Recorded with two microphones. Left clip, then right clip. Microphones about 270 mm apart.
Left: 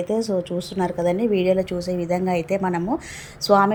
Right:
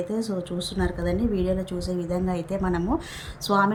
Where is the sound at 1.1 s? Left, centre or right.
Left.